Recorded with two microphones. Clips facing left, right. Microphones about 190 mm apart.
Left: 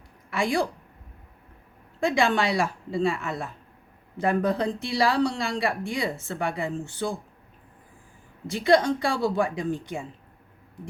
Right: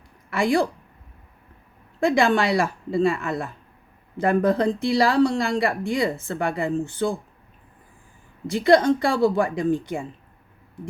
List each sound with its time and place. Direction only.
0.3 s speech: 55° right (ahead or behind)
2.0 s speech: 55° right (ahead or behind)
8.4 s speech: 55° right (ahead or behind)